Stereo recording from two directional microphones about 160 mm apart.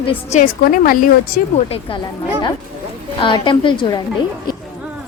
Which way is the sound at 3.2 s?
30° left (ahead or behind).